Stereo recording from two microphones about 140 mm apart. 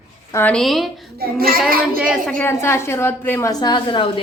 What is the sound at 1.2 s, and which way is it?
Child singing, 90° right.